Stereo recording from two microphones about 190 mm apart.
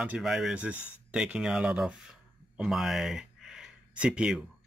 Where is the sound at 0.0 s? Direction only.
5° right (ahead or behind).